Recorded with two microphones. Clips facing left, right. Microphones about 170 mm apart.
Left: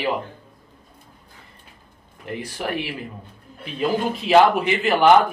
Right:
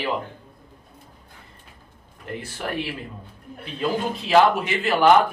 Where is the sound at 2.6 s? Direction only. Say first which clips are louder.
Left 1 dB; 15° left (ahead or behind).